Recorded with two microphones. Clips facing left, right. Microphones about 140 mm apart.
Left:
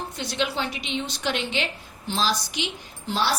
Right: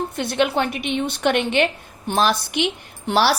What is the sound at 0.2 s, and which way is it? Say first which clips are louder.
A woman's voice: right 7 dB; 55° right (ahead or behind).